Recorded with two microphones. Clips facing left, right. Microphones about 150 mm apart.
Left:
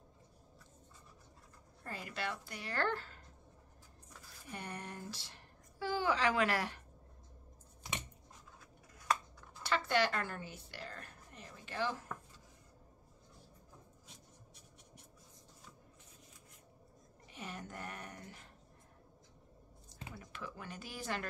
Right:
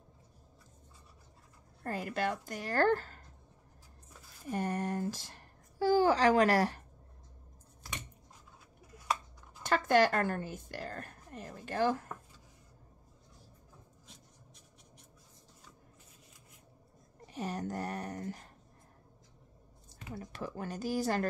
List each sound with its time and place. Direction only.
1.8 s a woman's voice: 50° right (ahead or behind)
4.5 s speech: 45° right (ahead or behind)
9.6 s speech: 45° right (ahead or behind)
14.0 s writing: 5° left (ahead or behind)
17.3 s a sound: 40° right (ahead or behind)
20.2 s speech: 40° right (ahead or behind)